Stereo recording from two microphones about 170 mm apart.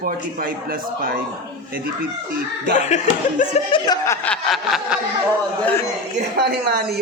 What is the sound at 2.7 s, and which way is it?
Speech, 45° left (ahead or behind).